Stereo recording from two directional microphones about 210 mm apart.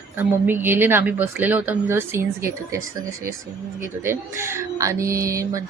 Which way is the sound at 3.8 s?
10° right (ahead or behind).